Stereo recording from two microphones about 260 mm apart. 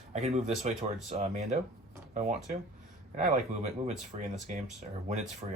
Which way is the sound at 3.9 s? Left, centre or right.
Right.